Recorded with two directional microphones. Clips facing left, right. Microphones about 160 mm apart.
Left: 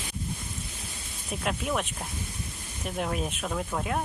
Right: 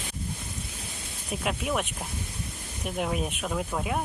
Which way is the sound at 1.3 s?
5° right (ahead or behind).